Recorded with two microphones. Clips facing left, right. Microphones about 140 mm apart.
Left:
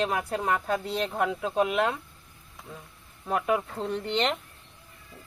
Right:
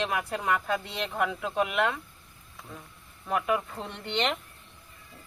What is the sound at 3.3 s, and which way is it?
Speech, 35° left (ahead or behind).